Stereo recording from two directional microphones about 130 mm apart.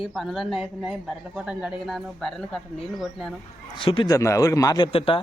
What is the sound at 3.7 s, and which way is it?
Speech, 40° left (ahead or behind).